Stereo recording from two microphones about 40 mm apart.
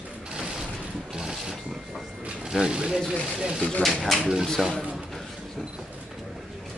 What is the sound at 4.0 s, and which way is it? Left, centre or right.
Speech, centre.